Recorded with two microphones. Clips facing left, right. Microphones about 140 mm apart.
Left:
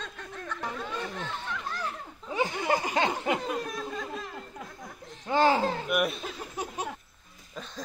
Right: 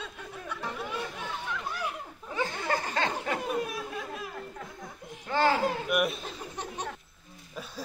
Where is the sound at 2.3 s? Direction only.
15° left (ahead or behind).